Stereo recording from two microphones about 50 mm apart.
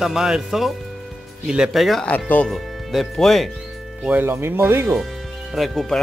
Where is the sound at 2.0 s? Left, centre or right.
Left.